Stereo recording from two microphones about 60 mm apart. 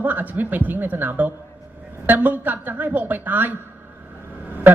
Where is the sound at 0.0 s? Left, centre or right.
Right.